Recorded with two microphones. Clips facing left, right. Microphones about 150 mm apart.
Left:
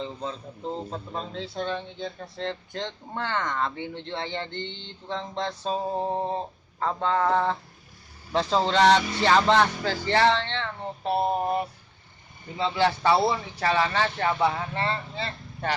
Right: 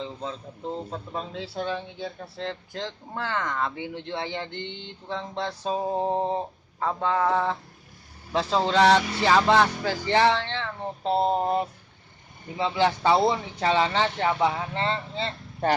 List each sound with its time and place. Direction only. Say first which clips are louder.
0.0 s speech: left 1 dB; centre (ahead or behind)
11.0 s speech: right 2 dB; 20° right (ahead or behind)